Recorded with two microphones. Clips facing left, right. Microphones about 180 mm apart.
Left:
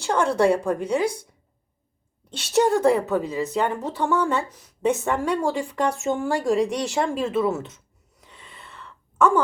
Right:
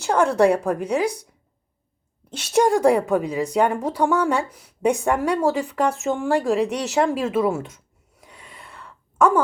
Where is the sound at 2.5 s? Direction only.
10° right (ahead or behind).